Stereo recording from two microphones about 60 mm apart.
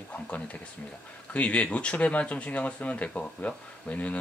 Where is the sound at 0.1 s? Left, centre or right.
Left.